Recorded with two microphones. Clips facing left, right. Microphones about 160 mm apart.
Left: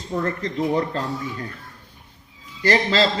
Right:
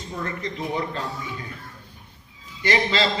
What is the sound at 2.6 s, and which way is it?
Speech, 40° left (ahead or behind).